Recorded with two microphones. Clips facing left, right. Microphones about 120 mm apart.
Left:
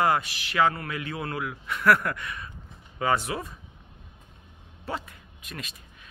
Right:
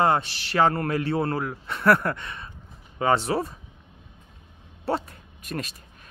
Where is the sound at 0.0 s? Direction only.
30° right (ahead or behind).